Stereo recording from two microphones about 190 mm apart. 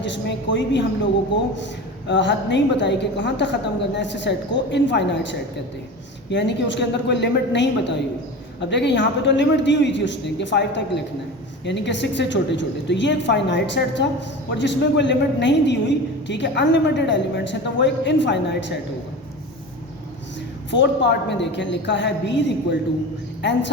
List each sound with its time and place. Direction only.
0.0 s a woman's voice: 70° left (ahead or behind)
2.0 s a woman's voice: 70° left (ahead or behind)
20.7 s a woman's voice: 70° left (ahead or behind)
23.4 s a woman's voice: 70° left (ahead or behind)